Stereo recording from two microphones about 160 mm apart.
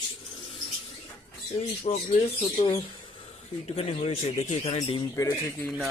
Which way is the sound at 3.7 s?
40° left (ahead or behind).